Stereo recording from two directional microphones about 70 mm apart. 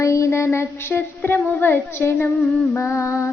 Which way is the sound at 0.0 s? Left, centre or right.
Left.